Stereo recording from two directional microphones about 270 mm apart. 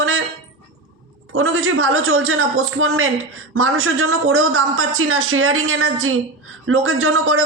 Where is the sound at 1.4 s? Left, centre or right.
Right.